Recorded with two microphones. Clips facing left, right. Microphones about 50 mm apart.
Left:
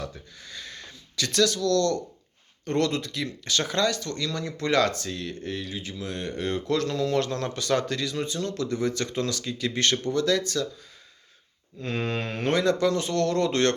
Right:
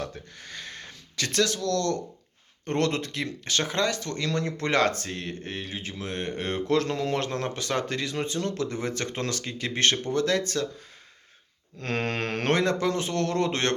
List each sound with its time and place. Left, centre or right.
0.0 s speech: right
11.8 s mantra: right
12.5 s speech: right